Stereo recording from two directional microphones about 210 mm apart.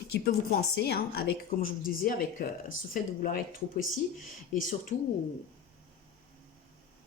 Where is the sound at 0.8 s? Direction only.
50° left (ahead or behind).